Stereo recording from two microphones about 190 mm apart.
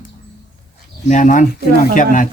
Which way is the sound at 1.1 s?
40° left (ahead or behind).